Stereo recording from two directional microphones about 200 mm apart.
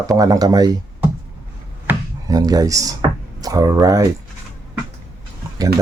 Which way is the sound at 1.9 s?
20° right (ahead or behind).